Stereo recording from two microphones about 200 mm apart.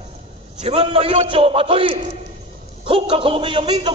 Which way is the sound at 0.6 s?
30° right (ahead or behind).